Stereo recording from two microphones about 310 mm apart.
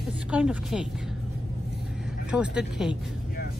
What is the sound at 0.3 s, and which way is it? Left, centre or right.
Speech, centre.